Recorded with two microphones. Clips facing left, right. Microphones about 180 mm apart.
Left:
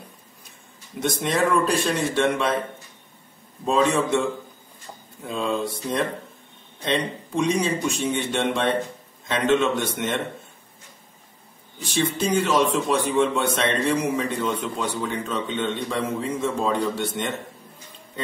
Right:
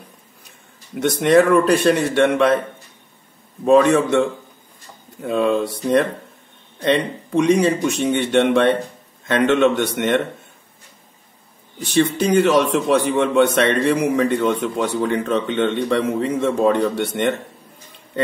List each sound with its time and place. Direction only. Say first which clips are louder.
0.9 s a man's voice: right 10 dB; 65° right (ahead or behind)
3.6 s a man's voice: right 7 dB; 65° right (ahead or behind)
11.8 s a man's voice: right 6 dB; 70° right (ahead or behind)